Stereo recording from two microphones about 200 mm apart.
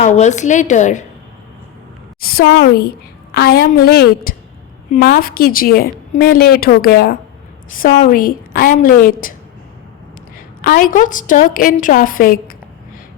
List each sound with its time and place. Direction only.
0.0 s a woman's voice: 35° left (ahead or behind)
2.2 s a woman's voice: 50° left (ahead or behind)
10.6 s a woman's voice: 45° left (ahead or behind)